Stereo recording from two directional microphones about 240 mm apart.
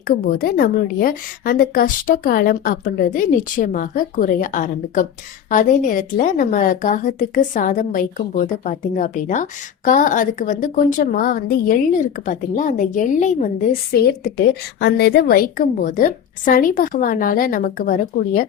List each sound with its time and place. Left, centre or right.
0.3 s a woman's voice: left
13.9 s a woman's voice: left